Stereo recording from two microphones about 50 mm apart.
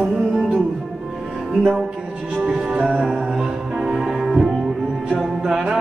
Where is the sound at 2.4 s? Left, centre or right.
Right.